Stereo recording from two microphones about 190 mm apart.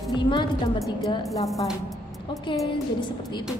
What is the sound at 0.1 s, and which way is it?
A woman's voice, 25° left (ahead or behind).